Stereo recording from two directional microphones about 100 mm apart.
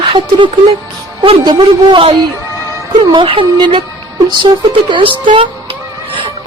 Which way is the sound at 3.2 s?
60° right (ahead or behind).